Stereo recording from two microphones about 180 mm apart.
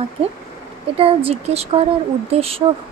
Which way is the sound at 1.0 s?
30° right (ahead or behind).